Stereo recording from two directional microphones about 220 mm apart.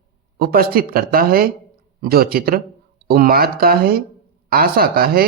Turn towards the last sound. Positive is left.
turn(degrees=-45)  # may be behind; listen again after turning